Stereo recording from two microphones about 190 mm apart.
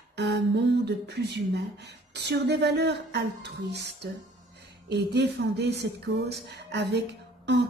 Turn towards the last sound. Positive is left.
turn(degrees=-65)  # may be behind; listen again after turning